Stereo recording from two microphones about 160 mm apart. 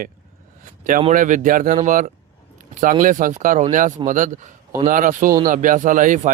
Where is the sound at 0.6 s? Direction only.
55° right (ahead or behind).